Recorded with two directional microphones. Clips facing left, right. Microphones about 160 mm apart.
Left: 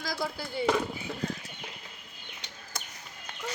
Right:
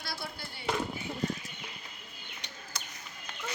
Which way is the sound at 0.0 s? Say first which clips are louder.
Left 7 dB; 90° left.